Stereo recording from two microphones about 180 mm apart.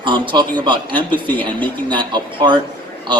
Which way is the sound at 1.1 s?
10° left (ahead or behind).